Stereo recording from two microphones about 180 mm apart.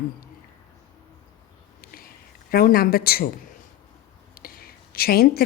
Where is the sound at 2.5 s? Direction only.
55° left (ahead or behind).